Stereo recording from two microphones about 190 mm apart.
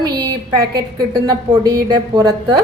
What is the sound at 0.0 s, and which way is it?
A woman's voice, 20° right (ahead or behind).